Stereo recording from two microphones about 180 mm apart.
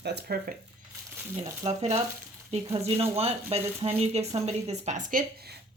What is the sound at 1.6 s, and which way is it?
Speech, 35° right (ahead or behind).